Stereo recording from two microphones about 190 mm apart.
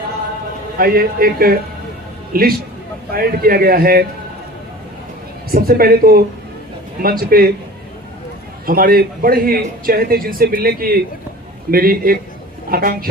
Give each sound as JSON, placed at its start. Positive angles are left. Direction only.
{"t": 0.8, "sound": "a man's voice", "side_deg": -50}
{"t": 5.5, "sound": "a man's voice", "side_deg": -50}
{"t": 8.6, "sound": "a man's voice", "side_deg": -50}